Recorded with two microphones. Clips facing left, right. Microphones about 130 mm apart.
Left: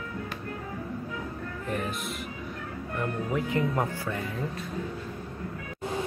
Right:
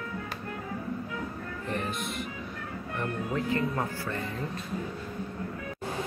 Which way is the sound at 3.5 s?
20° left (ahead or behind).